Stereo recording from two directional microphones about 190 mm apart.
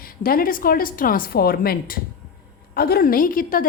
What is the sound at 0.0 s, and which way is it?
A woman's voice, 50° left (ahead or behind).